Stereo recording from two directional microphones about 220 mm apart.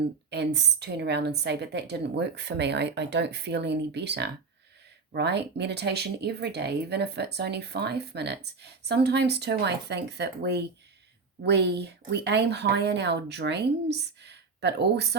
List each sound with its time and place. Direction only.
0.3 s speech: 50° right (ahead or behind)